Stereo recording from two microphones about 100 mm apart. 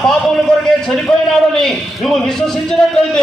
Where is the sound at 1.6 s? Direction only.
Centre (ahead or behind).